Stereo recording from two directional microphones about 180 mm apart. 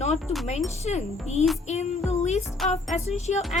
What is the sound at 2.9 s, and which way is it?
Speech, 40° left (ahead or behind).